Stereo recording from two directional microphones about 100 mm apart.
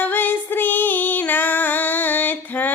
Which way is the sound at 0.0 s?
20° left (ahead or behind).